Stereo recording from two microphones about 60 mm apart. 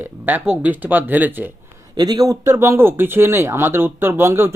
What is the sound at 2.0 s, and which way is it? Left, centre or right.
Speech, right.